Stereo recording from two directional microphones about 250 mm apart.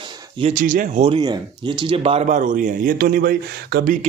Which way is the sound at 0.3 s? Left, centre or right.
Right.